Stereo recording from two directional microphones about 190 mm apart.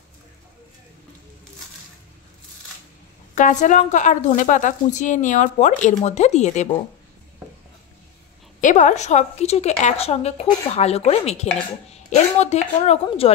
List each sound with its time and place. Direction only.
3.3 s a woman's voice: 40° left (ahead or behind)
8.5 s a woman's voice: 40° left (ahead or behind)